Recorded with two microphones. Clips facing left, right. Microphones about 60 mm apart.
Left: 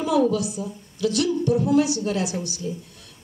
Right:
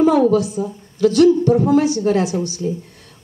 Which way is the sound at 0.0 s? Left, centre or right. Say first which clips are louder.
Right 7 dB; right.